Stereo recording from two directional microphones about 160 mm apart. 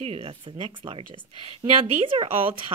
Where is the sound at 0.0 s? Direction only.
35° right (ahead or behind).